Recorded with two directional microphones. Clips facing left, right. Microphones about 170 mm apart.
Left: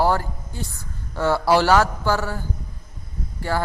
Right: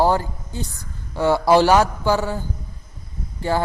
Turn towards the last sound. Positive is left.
turn(degrees=-20)  # may be behind; listen again after turning